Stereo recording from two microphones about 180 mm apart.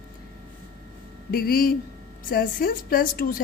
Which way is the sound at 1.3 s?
55° left (ahead or behind).